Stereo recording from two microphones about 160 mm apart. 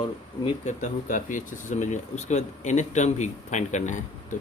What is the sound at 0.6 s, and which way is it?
Speech, 50° left (ahead or behind).